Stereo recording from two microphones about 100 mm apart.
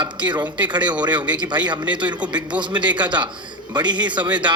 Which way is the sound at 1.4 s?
50° right (ahead or behind).